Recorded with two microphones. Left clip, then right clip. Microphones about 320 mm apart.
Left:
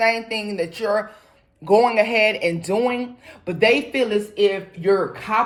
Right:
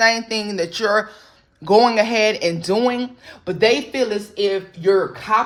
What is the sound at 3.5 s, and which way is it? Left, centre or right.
Speech, right.